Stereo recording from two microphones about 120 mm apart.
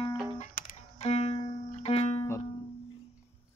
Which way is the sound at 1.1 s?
60° left (ahead or behind).